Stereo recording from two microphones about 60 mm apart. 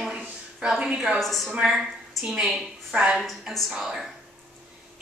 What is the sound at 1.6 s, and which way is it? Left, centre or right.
A woman's voice, centre.